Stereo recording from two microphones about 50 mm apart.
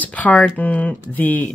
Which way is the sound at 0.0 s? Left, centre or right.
Left.